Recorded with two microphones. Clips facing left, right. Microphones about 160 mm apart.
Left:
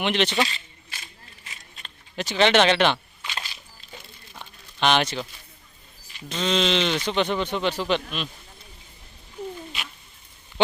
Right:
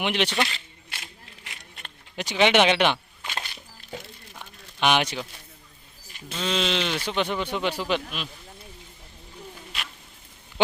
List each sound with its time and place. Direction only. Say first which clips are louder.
0.0 s speech: left 2 dB; 10° right (ahead or behind)
0.4 s a sound: left 1 dB; 65° right (ahead or behind)
1.5 s keys jangling: right 1 dB; 60° right (ahead or behind)
2.1 s speech: left 1 dB; 15° right (ahead or behind)
3.2 s music: right 1 dB; 55° right (ahead or behind)
4.4 s a sound: left 1 dB; 10° right (ahead or behind)
6.2 s speech: left 3 dB; 5° right (ahead or behind)